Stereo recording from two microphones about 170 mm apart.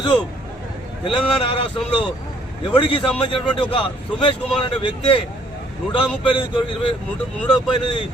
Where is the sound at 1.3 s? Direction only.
30° left (ahead or behind).